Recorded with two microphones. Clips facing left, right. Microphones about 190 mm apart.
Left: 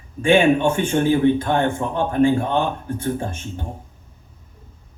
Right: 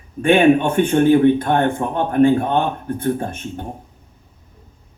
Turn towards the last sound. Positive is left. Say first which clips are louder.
# right 3 dB
turn(degrees=-60)  # may be behind; listen again after turning